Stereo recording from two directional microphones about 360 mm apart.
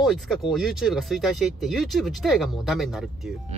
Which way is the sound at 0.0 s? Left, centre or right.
Centre.